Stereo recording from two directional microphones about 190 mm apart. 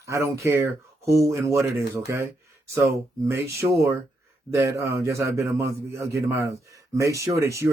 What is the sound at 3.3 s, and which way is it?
Speech, 15° right (ahead or behind).